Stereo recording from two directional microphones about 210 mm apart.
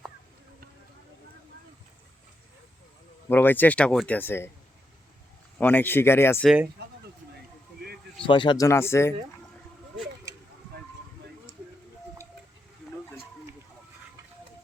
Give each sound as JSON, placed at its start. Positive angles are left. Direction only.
{"t": 3.2, "sound": "speech", "side_deg": 10}
{"t": 5.5, "sound": "speech", "side_deg": 10}
{"t": 6.8, "sound": "a sound", "side_deg": -55}
{"t": 8.3, "sound": "speech", "side_deg": 20}